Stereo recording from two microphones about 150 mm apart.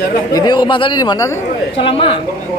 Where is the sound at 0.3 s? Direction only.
30° left (ahead or behind).